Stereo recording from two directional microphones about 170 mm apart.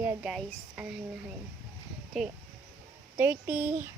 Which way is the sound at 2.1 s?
Centre (ahead or behind).